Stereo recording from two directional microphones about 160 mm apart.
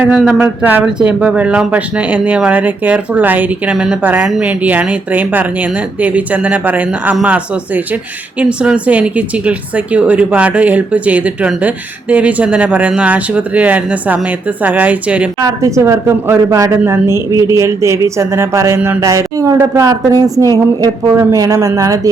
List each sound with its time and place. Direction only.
0.0 s speech: 10° right (ahead or behind)
15.4 s a woman's voice: 20° right (ahead or behind)